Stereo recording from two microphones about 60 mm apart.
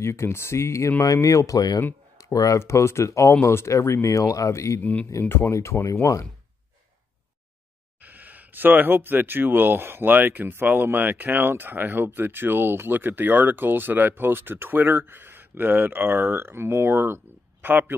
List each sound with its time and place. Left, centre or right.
0.0 s speech: left
1.0 s speech: left
2.6 s speech: left
8.0 s speech: right